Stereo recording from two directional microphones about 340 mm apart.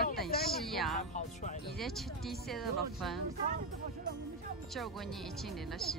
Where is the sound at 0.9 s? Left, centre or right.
Left.